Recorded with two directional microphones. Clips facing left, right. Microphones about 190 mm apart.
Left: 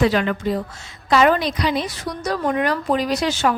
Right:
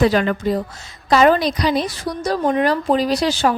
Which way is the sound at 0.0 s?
40° right (ahead or behind).